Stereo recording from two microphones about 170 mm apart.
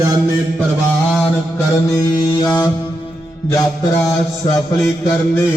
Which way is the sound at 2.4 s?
20° left (ahead or behind).